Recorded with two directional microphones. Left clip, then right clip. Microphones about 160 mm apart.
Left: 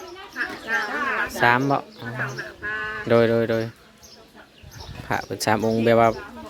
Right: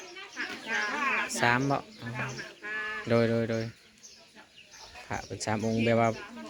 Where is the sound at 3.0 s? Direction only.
25° left (ahead or behind).